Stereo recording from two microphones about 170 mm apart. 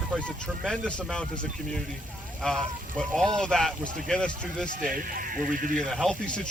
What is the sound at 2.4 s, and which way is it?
Speech, 5° left (ahead or behind).